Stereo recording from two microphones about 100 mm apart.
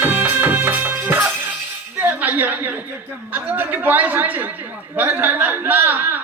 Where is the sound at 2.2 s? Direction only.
20° right (ahead or behind).